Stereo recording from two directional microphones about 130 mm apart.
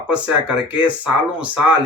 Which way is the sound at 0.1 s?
10° right (ahead or behind).